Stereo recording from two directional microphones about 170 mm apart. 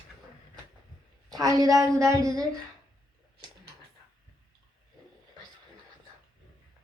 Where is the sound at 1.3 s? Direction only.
20° right (ahead or behind).